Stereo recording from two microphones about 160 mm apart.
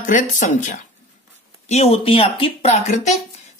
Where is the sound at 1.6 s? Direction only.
40° left (ahead or behind).